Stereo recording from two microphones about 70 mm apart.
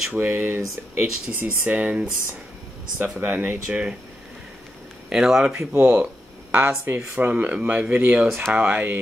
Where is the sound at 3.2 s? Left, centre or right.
Right.